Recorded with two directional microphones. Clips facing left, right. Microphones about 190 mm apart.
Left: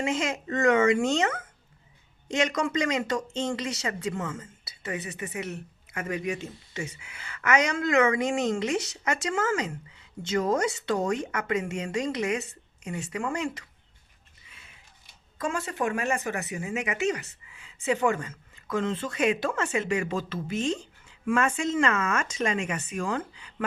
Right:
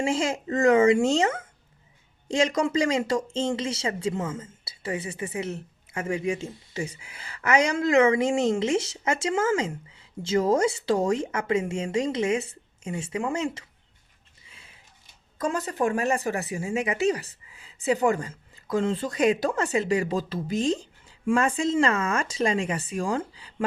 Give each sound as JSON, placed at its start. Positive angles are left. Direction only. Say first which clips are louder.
{"t": 0.0, "sound": "a woman's voice", "louder": "right 3 dB", "side_deg": -30}
{"t": 14.5, "sound": "a sound", "louder": "right 1 dB", "side_deg": -30}
{"t": 15.4, "sound": "speech", "louder": "right 3 dB", "side_deg": -40}